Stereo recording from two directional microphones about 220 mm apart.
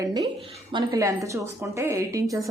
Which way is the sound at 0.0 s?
15° right (ahead or behind).